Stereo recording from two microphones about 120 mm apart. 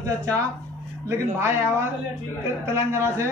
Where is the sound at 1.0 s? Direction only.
20° right (ahead or behind).